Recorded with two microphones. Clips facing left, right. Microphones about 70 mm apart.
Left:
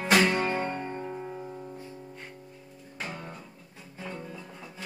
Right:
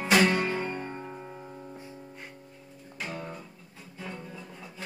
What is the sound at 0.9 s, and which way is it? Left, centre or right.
Music, centre.